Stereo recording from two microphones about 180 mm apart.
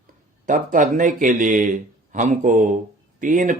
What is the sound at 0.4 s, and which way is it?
Speech, 45° right (ahead or behind).